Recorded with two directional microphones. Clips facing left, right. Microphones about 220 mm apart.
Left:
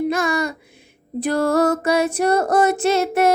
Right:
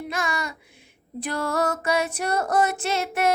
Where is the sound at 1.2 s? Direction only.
40° left (ahead or behind).